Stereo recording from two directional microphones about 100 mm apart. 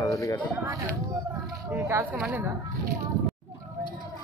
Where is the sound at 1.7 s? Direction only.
20° right (ahead or behind).